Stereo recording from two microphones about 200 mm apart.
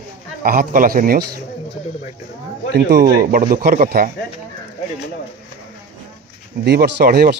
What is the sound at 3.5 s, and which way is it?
Speech, 45° right (ahead or behind).